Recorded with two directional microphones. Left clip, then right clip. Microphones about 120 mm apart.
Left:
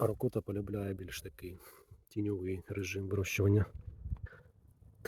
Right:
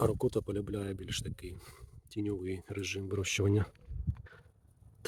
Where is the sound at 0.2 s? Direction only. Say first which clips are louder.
Right 3 dB; 15° right (ahead or behind); by 3.7 s centre (ahead or behind).